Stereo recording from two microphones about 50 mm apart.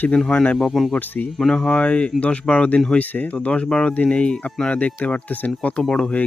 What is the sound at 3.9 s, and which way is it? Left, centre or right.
Speech, left.